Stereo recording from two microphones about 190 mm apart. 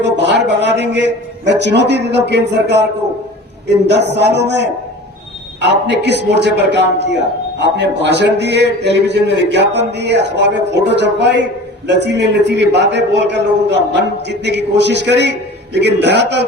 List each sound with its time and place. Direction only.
0.0 s a man's voice: 65° right (ahead or behind)
3.8 s a man's voice: 65° right (ahead or behind)